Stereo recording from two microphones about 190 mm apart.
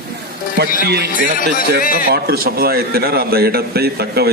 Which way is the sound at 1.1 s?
45° left (ahead or behind).